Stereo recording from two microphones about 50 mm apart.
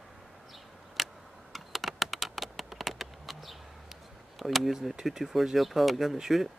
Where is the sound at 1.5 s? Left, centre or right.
Centre.